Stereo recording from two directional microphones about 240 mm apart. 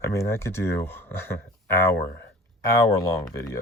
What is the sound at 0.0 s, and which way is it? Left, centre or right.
Speech, centre.